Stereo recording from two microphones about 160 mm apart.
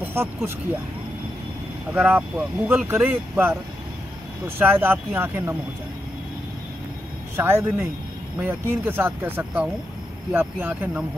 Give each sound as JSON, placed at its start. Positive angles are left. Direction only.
{"t": 0.0, "sound": "speech", "side_deg": -15}
{"t": 1.9, "sound": "speech", "side_deg": -10}
{"t": 4.6, "sound": "speech", "side_deg": -15}
{"t": 7.3, "sound": "speech", "side_deg": -15}